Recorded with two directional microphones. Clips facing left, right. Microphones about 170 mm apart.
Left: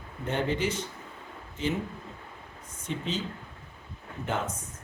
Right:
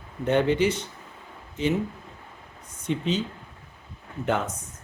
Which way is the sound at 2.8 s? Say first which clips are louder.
Right 6 dB; 70° right (ahead or behind).